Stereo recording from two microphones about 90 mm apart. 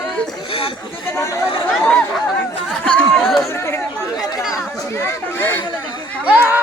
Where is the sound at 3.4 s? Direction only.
30° left (ahead or behind).